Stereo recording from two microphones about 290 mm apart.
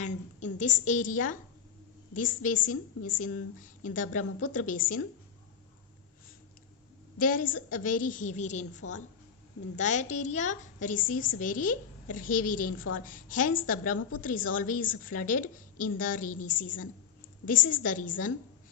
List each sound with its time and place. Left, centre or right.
0.0 s a sound: left
0.6 s a woman's voice: left
7.2 s a woman's voice: left
8.8 s a woman's voice: left
9.7 s a woman's voice: left